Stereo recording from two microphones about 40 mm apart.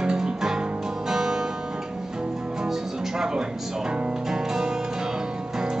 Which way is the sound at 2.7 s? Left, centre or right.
Centre.